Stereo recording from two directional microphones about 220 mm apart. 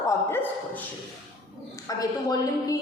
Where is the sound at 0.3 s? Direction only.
5° left (ahead or behind).